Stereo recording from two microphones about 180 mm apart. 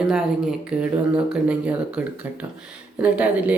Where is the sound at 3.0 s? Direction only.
5° right (ahead or behind).